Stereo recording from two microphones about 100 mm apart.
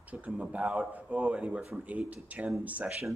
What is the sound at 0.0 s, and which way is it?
A man's voice, 15° right (ahead or behind).